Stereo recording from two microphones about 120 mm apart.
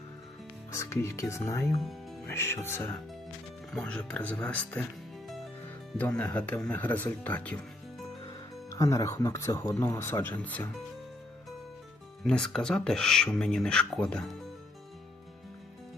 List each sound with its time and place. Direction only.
0.7 s speech: 25° left (ahead or behind)
3.7 s speech: 5° left (ahead or behind)
6.0 s speech: 10° left (ahead or behind)
8.7 s speech: 30° left (ahead or behind)
12.2 s speech: 5° left (ahead or behind)